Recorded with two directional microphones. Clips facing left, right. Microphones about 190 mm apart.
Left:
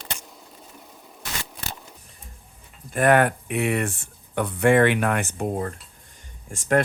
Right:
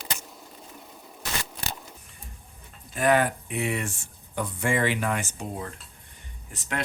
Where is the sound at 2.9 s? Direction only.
55° left (ahead or behind).